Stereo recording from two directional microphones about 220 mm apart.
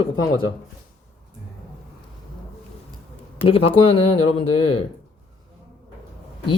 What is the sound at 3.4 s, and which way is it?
Speech, 25° left (ahead or behind).